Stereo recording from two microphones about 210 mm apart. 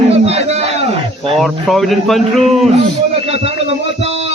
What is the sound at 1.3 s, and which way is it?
Speech, centre (ahead or behind).